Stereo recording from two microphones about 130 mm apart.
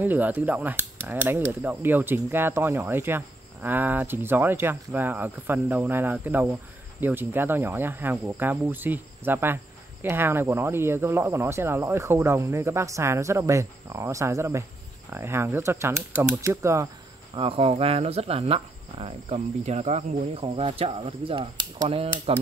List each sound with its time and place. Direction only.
0.0 s speech: 15° right (ahead or behind)
17.4 s speech: 50° right (ahead or behind)
20.4 s speech: 45° right (ahead or behind)